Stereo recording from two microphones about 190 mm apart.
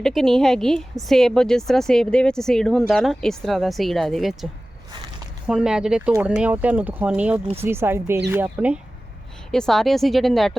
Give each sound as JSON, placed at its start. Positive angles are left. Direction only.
{"t": 0.0, "sound": "a woman's voice", "side_deg": 0}
{"t": 5.5, "sound": "a woman's voice", "side_deg": -5}